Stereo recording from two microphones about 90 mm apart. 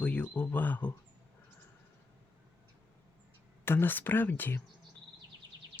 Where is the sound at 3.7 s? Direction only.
25° left (ahead or behind).